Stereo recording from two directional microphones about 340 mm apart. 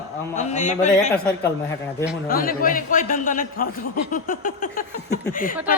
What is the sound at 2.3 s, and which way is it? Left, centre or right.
A man's voice, left.